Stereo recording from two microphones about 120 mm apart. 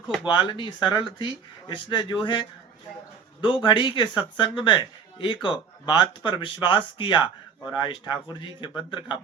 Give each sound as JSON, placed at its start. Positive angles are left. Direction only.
{"t": 0.3, "sound": "speech", "side_deg": 40}